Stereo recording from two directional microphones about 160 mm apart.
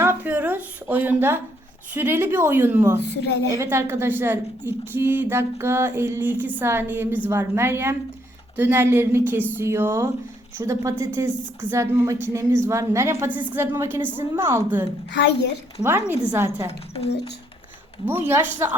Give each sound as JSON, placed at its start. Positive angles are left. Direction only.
{"t": 0.0, "sound": "a sound", "side_deg": -15}
{"t": 1.9, "sound": "a woman's voice", "side_deg": -15}
{"t": 15.1, "sound": "a woman's voice", "side_deg": 90}
{"t": 15.8, "sound": "a woman's voice", "side_deg": -15}
{"t": 16.9, "sound": "speech", "side_deg": 40}
{"t": 18.0, "sound": "a woman's voice", "side_deg": -15}